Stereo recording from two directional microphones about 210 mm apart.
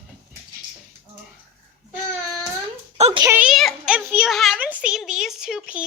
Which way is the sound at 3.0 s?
30° right (ahead or behind).